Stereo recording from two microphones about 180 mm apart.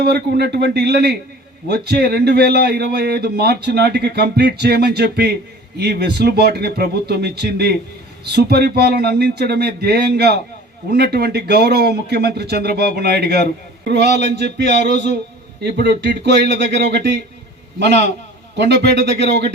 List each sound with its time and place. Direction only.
0.0 s a man's voice: 65° right (ahead or behind)
14.4 s a sound: 40° left (ahead or behind)
15.6 s speech: 65° right (ahead or behind)
18.5 s speech: 75° right (ahead or behind)